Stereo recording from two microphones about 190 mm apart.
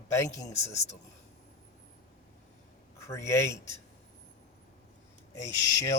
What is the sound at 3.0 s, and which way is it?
Speech, 15° left (ahead or behind).